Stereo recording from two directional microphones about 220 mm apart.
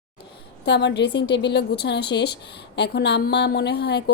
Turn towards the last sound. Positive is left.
turn(degrees=50)  # may be behind; listen again after turning